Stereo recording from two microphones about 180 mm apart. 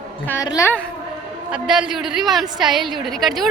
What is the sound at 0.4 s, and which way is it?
Speech, 15° left (ahead or behind).